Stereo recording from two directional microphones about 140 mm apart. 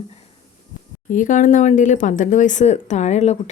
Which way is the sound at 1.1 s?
65° left (ahead or behind).